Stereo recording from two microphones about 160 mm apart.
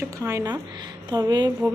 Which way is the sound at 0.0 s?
20° right (ahead or behind).